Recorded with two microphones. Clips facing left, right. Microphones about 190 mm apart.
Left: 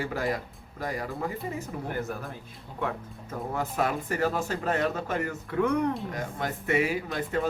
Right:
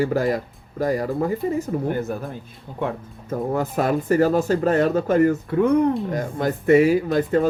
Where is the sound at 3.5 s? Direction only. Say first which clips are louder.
Right 6 dB; 40° right (ahead or behind).